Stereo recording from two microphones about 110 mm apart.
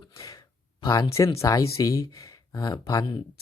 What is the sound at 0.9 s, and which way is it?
Speech, 35° left (ahead or behind).